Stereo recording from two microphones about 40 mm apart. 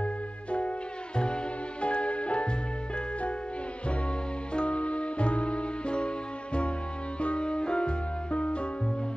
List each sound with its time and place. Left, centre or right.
0.0 s music: left
4.6 s music: left